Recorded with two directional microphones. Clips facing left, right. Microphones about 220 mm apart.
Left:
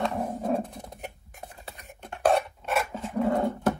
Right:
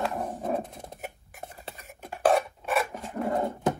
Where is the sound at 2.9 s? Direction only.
15° right (ahead or behind).